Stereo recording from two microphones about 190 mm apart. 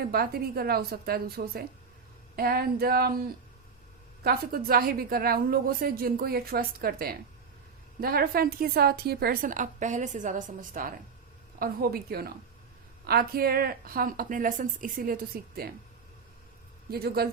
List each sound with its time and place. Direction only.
0.1 s a woman's voice: 55° right (ahead or behind)
16.9 s a woman's voice: 55° right (ahead or behind)